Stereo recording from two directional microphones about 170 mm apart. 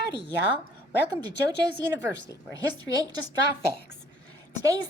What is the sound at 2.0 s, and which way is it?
Speech, 20° right (ahead or behind).